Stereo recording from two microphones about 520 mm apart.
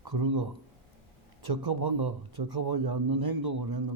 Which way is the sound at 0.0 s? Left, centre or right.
Right.